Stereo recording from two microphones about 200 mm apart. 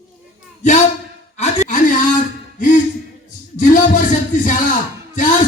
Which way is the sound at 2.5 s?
40° left (ahead or behind).